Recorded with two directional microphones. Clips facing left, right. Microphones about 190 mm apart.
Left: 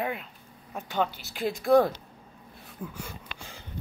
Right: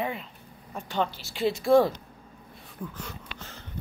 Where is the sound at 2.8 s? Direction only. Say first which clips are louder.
Even; 10° left (ahead or behind).